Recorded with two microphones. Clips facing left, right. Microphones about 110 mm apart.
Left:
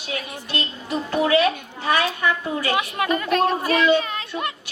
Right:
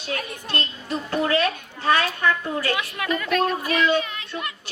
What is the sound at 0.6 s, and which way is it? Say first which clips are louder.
A woman's voice: left 2 dB; 15° left (ahead or behind).